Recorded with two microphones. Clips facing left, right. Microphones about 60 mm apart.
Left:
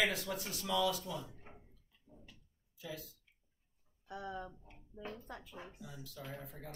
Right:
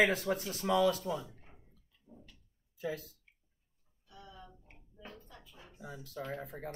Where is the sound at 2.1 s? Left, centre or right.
Right.